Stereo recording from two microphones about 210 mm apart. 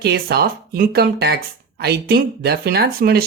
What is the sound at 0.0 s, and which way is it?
Speech, 50° right (ahead or behind).